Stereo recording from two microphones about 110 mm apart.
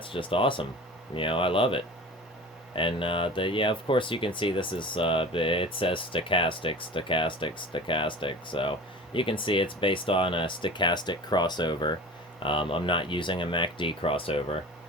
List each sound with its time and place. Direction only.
0.0 s speech: 50° left (ahead or behind)